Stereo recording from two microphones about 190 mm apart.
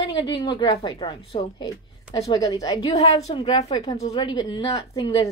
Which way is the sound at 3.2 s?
30° left (ahead or behind).